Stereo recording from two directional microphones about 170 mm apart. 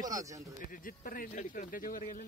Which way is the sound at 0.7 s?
55° left (ahead or behind).